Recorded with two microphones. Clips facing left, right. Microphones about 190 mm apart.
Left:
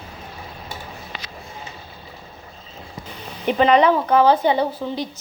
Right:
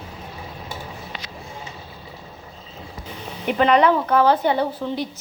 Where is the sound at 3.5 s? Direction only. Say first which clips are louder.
Left 1 dB; 20° left (ahead or behind).